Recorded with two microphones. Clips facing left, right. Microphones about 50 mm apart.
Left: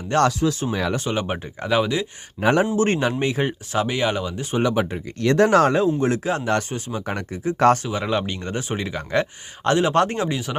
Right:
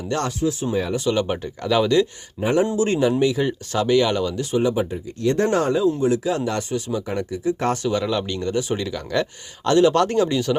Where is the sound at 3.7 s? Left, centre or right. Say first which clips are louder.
Right 4 dB; left.